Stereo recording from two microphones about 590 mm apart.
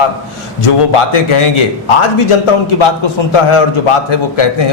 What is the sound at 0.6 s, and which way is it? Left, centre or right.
Speech, left.